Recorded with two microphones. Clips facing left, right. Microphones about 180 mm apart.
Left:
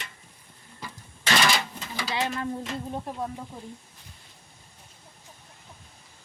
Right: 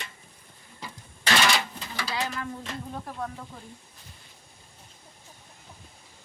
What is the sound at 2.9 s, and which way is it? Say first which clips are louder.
Speech: left 3 dB; 20° left (ahead or behind).